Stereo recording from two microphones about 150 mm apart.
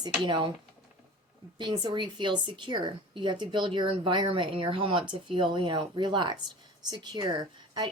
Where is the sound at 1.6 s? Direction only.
30° right (ahead or behind).